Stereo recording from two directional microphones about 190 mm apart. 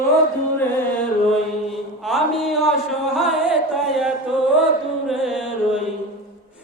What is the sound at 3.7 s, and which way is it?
Chant, centre (ahead or behind).